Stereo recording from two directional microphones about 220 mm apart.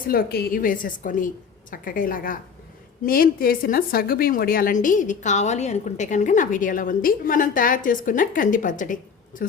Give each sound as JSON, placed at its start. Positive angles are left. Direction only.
{"t": 0.1, "sound": "a woman's voice", "side_deg": 45}